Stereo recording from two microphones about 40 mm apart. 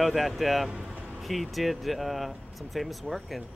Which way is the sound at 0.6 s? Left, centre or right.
Centre.